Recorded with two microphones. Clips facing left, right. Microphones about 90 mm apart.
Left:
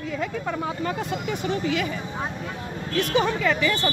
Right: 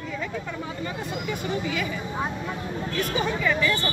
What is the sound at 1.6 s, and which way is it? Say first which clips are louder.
Speech: left 3 dB; 50° left (ahead or behind).